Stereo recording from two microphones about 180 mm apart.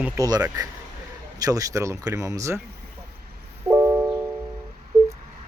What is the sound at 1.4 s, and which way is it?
Speech, 20° right (ahead or behind).